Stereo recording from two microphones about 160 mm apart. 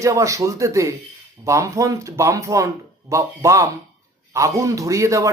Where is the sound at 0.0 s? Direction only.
20° right (ahead or behind).